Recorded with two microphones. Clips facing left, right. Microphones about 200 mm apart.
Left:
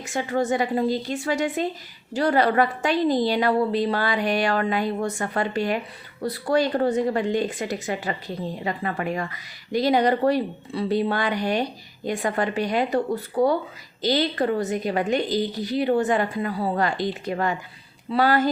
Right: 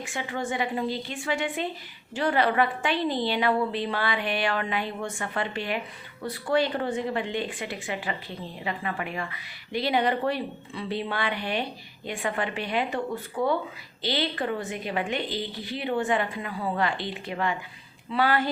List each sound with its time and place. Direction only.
0.0 s a woman's voice: 40° left (ahead or behind)